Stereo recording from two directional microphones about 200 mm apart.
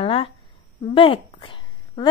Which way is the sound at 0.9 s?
25° left (ahead or behind).